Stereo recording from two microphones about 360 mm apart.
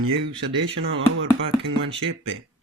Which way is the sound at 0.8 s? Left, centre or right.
Right.